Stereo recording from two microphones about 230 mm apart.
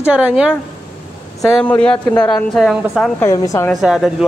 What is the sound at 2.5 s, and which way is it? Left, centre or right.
Speech, centre.